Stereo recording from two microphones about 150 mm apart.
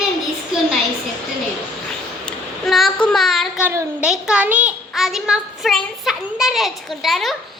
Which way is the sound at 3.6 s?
15° right (ahead or behind).